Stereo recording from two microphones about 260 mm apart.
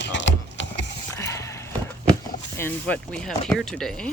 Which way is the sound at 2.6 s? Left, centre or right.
Centre.